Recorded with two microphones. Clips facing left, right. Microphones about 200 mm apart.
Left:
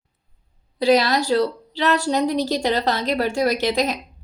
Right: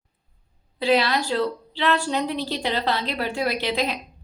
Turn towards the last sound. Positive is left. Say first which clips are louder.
# left 4 dB
turn(degrees=45)  # may be behind; listen again after turning